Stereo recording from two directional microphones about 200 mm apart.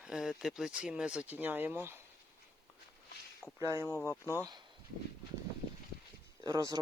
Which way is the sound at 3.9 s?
15° left (ahead or behind).